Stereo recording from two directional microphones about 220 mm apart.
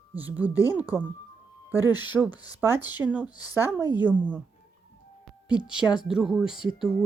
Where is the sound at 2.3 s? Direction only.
15° left (ahead or behind).